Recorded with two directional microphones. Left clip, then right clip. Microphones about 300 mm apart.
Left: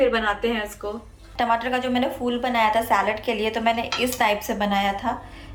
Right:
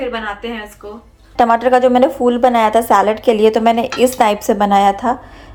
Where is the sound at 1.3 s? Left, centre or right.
Centre.